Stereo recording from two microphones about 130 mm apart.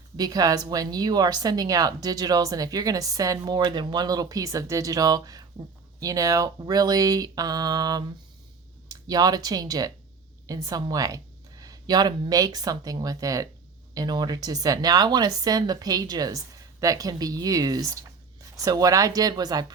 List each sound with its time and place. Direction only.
0.2 s a woman's voice: 30° right (ahead or behind)